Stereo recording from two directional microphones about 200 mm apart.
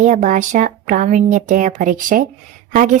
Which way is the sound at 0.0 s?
40° right (ahead or behind).